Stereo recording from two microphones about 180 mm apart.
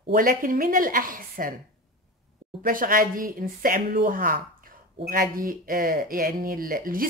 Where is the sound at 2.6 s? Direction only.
50° right (ahead or behind).